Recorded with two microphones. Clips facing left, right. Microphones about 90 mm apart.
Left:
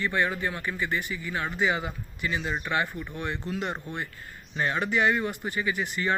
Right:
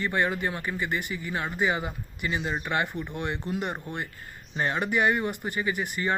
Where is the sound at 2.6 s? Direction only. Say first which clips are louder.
Even; 20° right (ahead or behind).